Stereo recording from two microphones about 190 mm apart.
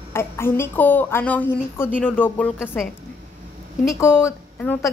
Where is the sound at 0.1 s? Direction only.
15° left (ahead or behind).